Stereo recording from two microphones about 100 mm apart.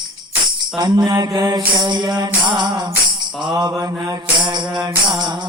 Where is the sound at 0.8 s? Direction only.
45° right (ahead or behind).